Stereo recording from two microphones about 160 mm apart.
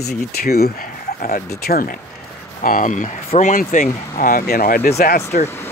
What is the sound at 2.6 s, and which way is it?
Speech, 60° left (ahead or behind).